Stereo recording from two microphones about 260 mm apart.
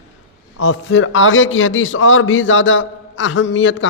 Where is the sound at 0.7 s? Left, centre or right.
Left.